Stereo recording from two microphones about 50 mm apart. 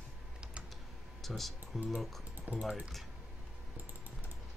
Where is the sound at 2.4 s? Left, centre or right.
Right.